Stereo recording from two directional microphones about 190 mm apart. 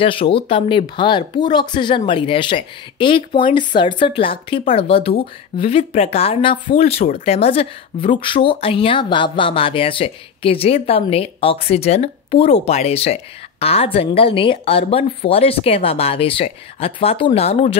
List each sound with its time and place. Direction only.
0.0 s a woman's voice: 25° left (ahead or behind)